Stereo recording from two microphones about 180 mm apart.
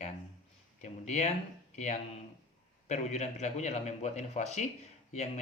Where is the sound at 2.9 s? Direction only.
40° left (ahead or behind).